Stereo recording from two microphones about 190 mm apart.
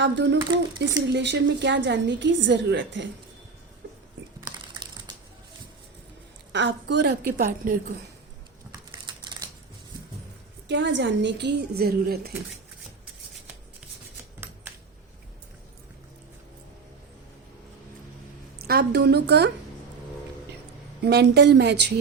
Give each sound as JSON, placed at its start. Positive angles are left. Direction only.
{"t": 0.0, "sound": "a woman's voice", "side_deg": -65}
{"t": 0.3, "sound": "speech", "side_deg": -20}
{"t": 1.1, "sound": "a woman's voice", "side_deg": -65}
{"t": 6.5, "sound": "a woman's voice", "side_deg": -70}
{"t": 9.0, "sound": "typewriter", "side_deg": -25}
{"t": 10.7, "sound": "a woman's voice", "side_deg": -70}
{"t": 18.6, "sound": "a woman's voice", "side_deg": -55}
{"t": 21.0, "sound": "a woman's voice", "side_deg": -60}